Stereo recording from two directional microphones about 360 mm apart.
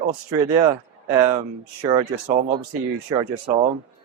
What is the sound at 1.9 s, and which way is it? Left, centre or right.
Speech, centre.